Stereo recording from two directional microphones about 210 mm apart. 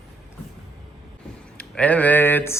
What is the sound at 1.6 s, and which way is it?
Speech, 5° left (ahead or behind).